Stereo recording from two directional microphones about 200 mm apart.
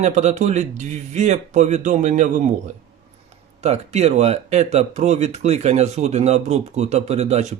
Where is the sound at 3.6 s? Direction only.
35° right (ahead or behind).